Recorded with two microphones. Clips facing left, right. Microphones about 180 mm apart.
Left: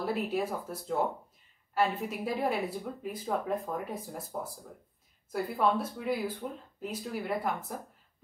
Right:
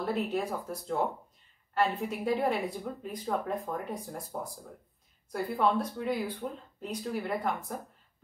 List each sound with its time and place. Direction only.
0.0 s speech: 5° left (ahead or behind)